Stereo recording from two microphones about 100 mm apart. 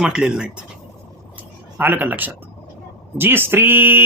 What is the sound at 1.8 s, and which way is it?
Speech, 20° right (ahead or behind).